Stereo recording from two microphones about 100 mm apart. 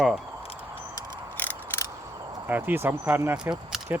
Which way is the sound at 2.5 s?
20° right (ahead or behind).